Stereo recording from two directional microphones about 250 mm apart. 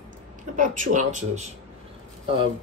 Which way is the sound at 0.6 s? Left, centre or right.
Right.